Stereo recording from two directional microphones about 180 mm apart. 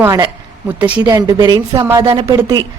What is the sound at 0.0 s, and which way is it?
A woman's voice, 20° right (ahead or behind).